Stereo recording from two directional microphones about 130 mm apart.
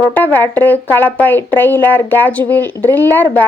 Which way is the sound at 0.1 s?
15° left (ahead or behind).